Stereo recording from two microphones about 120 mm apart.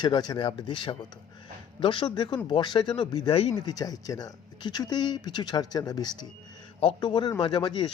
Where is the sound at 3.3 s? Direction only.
55° left (ahead or behind).